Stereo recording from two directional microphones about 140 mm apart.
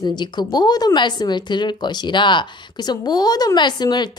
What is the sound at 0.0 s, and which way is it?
Speech, 30° left (ahead or behind).